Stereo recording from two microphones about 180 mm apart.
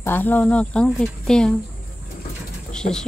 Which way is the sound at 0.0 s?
10° left (ahead or behind).